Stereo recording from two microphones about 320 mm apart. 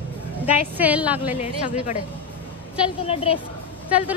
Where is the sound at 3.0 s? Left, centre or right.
Centre.